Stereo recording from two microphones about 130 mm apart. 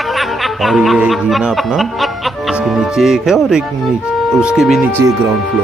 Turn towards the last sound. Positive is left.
turn(degrees=-20)  # may be behind; listen again after turning